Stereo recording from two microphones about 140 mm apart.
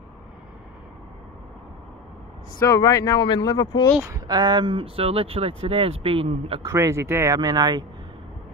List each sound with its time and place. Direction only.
2.6 s speech: 25° left (ahead or behind)
4.3 s speech: 30° right (ahead or behind)
6.7 s speech: 20° right (ahead or behind)